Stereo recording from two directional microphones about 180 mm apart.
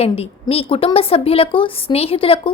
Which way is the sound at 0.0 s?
35° left (ahead or behind).